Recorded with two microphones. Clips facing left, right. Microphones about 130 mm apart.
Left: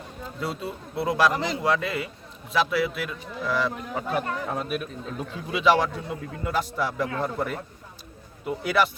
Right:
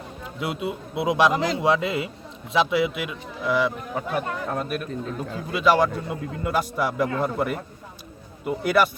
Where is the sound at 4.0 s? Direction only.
Centre (ahead or behind).